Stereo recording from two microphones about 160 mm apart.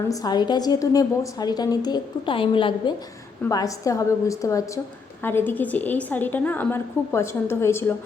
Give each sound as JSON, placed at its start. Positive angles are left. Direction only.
{"t": 0.1, "sound": "a woman's voice", "side_deg": 25}
{"t": 3.5, "sound": "a woman's voice", "side_deg": 20}